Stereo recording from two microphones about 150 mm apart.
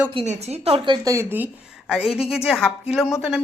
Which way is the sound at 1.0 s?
20° right (ahead or behind).